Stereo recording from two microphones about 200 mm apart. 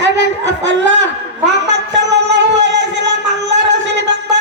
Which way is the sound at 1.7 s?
60° right (ahead or behind).